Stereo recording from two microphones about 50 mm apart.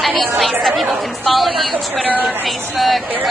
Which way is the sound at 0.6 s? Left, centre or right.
Centre.